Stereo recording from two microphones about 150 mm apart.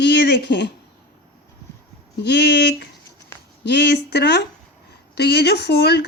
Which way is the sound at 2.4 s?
90° left.